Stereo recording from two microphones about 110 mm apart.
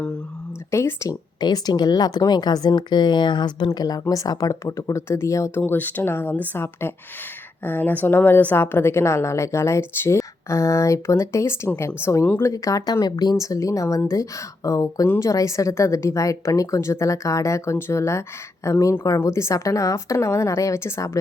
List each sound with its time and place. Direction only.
0.7 s a woman's voice: 25° left (ahead or behind)
1.4 s a woman's voice: 40° left (ahead or behind); by 12.5 s 20° left (ahead or behind)
12.5 s a woman's voice: 30° left (ahead or behind)